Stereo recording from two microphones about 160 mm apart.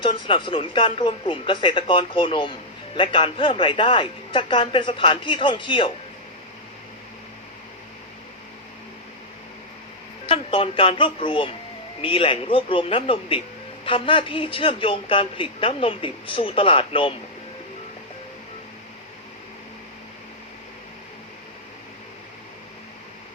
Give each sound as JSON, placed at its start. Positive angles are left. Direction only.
{"t": 0.0, "sound": "a man's voice", "side_deg": 30}
{"t": 10.2, "sound": "a man's voice", "side_deg": 35}